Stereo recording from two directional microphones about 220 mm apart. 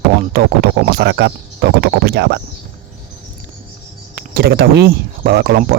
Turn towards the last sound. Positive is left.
turn(degrees=-45)  # may be behind; listen again after turning